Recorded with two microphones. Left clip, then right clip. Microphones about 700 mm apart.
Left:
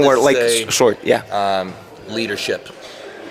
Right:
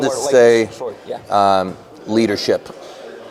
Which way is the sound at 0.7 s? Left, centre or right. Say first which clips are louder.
Left 12 dB; left.